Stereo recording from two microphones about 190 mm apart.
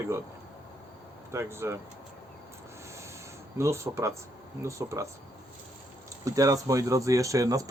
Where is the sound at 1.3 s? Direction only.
15° right (ahead or behind).